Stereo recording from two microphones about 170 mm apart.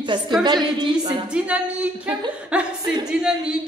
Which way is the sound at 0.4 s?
25° right (ahead or behind).